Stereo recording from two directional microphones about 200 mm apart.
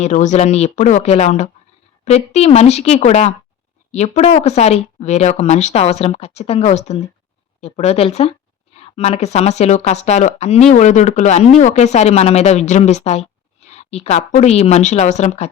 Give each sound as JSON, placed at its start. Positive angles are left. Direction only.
{"t": 0.0, "sound": "speech", "side_deg": 35}